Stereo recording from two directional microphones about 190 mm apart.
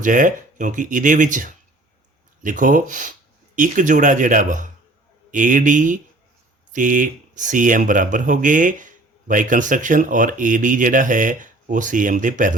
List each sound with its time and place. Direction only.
0.0 s speech: 45° right (ahead or behind)